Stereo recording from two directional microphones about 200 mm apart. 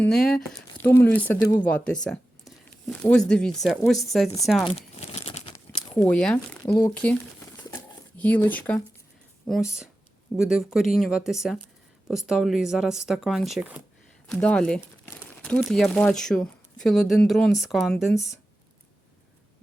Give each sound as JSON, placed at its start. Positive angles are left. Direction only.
{"t": 0.0, "sound": "speech", "side_deg": 0}
{"t": 4.6, "sound": "crumpling", "side_deg": 30}
{"t": 6.0, "sound": "speech", "side_deg": 5}
{"t": 7.0, "sound": "crumpling", "side_deg": 5}
{"t": 7.7, "sound": "a sound", "side_deg": 10}
{"t": 9.5, "sound": "speech", "side_deg": 0}
{"t": 14.3, "sound": "speech", "side_deg": 5}